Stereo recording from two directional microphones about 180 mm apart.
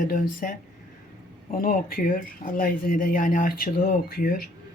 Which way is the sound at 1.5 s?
50° left (ahead or behind).